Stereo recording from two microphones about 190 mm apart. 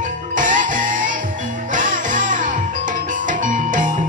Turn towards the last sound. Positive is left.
turn(degrees=-40)  # may be behind; listen again after turning